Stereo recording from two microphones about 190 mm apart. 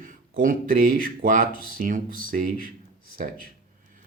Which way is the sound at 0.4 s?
45° right (ahead or behind).